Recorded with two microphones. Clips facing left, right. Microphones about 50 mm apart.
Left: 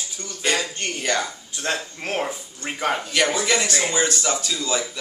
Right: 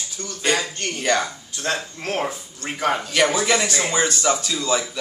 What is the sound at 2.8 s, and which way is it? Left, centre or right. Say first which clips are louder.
Speech: right 2 dB; centre.